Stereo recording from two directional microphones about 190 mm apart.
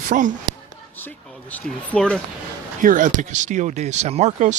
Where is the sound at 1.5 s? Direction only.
5° left (ahead or behind).